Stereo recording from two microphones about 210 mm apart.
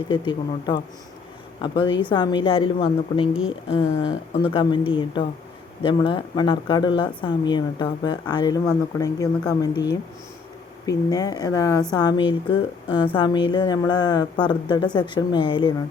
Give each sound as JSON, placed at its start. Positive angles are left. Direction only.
{"t": 0.1, "sound": "a woman's voice", "side_deg": 20}